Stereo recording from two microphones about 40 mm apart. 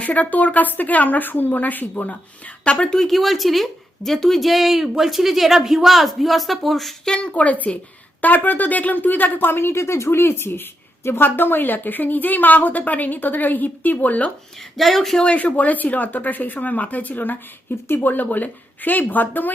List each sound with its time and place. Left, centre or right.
0.0 s a woman's voice: left
2.6 s speech: left
3.1 s a woman's voice: centre
7.2 s a woman's voice: left
8.2 s a woman's voice: left
9.5 s a woman's voice: left
14.8 s a woman's voice: centre
15.2 s a woman's voice: left